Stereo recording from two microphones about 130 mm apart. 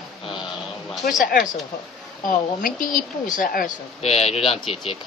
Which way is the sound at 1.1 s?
90° left.